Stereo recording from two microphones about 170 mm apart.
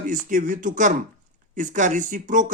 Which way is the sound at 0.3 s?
50° right (ahead or behind).